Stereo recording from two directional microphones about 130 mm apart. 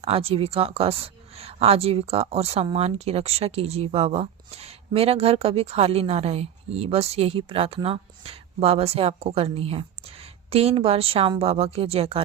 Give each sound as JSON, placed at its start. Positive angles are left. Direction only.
{"t": 0.0, "sound": "speech", "side_deg": -45}